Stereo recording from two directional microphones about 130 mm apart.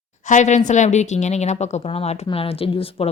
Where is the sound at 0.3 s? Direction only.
75° left (ahead or behind).